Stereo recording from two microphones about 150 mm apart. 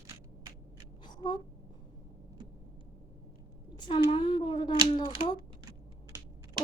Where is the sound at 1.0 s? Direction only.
30° left (ahead or behind).